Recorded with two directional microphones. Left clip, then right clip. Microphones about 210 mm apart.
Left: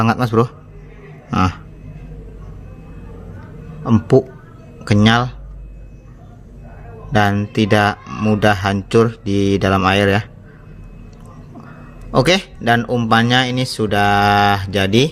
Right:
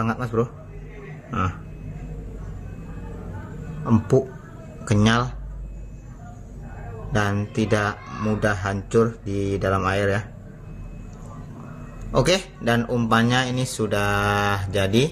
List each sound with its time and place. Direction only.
0.0 s a man's voice: 45° left (ahead or behind)
3.8 s speech: 30° left (ahead or behind)
7.1 s speech: 35° left (ahead or behind)
12.1 s speech: 35° left (ahead or behind)